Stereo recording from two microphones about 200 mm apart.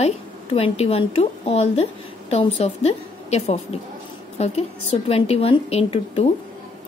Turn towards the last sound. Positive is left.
turn(degrees=30)  # may be behind; listen again after turning